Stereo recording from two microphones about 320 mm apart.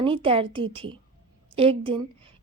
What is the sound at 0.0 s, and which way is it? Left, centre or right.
A woman's voice, centre.